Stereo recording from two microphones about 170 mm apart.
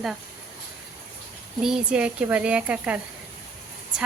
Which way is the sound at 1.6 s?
5° right (ahead or behind).